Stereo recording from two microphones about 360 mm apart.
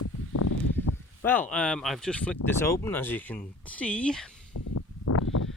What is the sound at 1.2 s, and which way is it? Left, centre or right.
Speech, centre.